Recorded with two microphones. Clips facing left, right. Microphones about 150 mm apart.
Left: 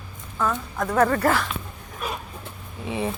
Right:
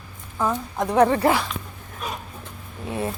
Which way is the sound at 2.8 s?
Centre (ahead or behind).